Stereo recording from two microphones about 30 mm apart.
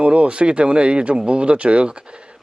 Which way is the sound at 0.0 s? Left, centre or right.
Right.